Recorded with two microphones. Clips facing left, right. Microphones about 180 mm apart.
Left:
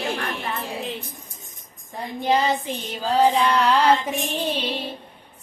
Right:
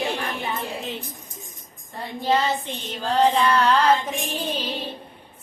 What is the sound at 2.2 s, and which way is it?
Mantra, 15° left (ahead or behind).